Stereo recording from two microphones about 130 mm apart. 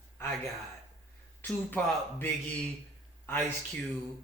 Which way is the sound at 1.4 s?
15° left (ahead or behind).